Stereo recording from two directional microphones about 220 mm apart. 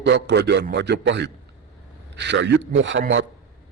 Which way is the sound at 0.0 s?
50° right (ahead or behind).